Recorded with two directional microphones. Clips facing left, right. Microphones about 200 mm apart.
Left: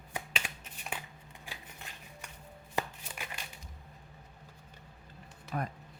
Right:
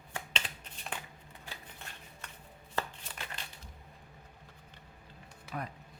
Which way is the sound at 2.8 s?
15° left (ahead or behind).